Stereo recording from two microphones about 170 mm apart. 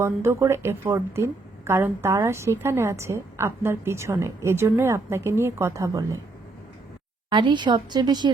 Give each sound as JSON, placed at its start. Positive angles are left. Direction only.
{"t": 0.0, "sound": "a woman's voice", "side_deg": -15}
{"t": 7.3, "sound": "speech", "side_deg": -25}